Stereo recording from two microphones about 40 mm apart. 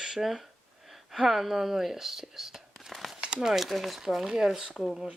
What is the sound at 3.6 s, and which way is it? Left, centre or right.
Speech, centre.